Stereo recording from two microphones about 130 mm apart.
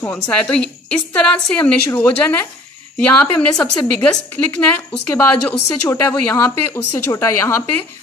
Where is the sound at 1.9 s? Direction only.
20° left (ahead or behind).